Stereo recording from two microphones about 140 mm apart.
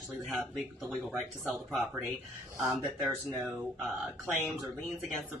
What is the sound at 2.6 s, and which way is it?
Speech, 15° right (ahead or behind).